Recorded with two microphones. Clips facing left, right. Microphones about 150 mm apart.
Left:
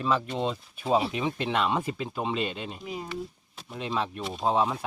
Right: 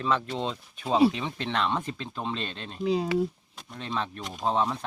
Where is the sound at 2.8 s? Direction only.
80° right.